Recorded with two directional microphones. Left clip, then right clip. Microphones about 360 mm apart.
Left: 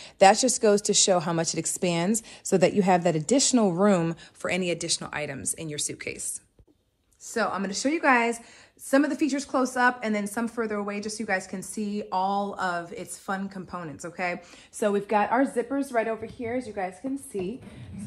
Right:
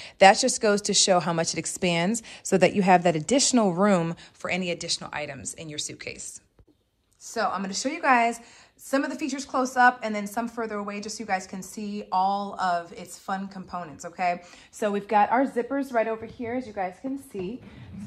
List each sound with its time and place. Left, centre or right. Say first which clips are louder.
0.0 s speech: right 1 dB; right
7.2 s a woman's voice: even; centre